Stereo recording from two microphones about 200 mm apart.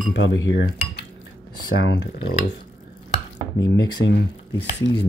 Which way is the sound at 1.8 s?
60° left (ahead or behind).